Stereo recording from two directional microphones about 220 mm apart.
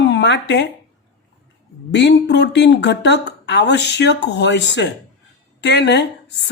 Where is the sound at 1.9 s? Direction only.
55° left (ahead or behind).